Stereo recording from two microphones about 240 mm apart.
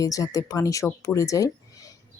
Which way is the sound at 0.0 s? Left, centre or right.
Centre.